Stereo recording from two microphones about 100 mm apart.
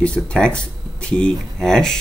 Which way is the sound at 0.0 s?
10° left (ahead or behind).